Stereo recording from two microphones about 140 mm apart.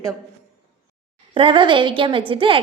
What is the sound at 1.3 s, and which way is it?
A woman's voice, 35° right (ahead or behind).